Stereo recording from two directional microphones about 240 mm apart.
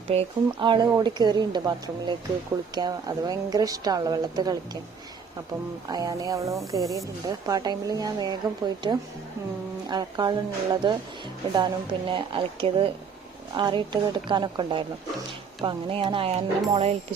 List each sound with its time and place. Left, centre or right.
0.1 s a woman's voice: right
5.9 s a woman's voice: centre